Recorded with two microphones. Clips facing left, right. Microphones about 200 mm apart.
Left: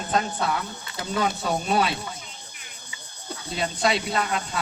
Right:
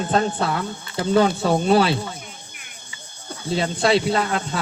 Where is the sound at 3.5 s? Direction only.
30° right (ahead or behind).